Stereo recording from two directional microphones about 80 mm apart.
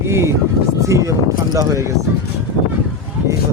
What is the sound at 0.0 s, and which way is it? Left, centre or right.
Speech, right.